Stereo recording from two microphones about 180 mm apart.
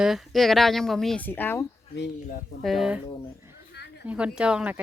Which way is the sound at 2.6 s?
Centre (ahead or behind).